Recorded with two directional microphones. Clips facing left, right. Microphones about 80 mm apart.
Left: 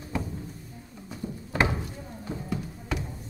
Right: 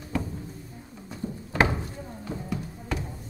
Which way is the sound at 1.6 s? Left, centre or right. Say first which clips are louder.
Right 2 dB; right.